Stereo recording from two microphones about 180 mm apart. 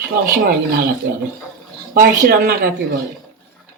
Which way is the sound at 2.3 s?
55° right (ahead or behind).